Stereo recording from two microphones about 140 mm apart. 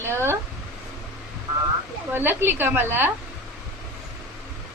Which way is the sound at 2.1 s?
15° right (ahead or behind).